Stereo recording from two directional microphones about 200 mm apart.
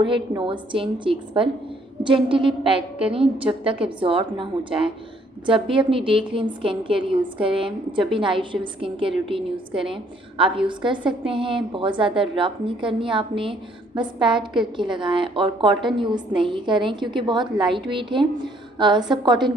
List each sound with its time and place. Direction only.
0.0 s a woman's voice: 25° right (ahead or behind)